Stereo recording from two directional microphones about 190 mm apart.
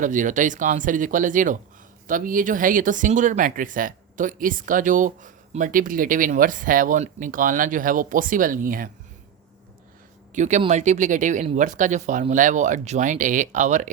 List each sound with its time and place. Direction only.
0.0 s speech: 40° right (ahead or behind)
10.3 s speech: 40° right (ahead or behind)